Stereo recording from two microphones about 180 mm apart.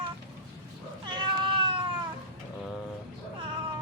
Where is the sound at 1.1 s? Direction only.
25° right (ahead or behind).